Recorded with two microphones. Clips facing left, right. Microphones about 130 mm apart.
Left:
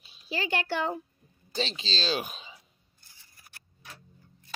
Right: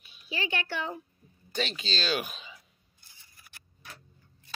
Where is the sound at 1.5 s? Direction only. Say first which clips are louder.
Even; 30° left (ahead or behind).